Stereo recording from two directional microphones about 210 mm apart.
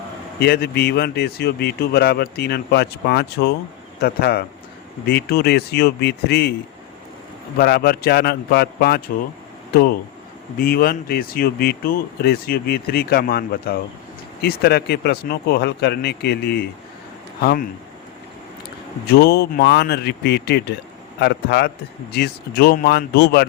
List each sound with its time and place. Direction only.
0.3 s speech: 50° left (ahead or behind)
7.6 s speech: 45° left (ahead or behind)
19.1 s speech: 50° left (ahead or behind)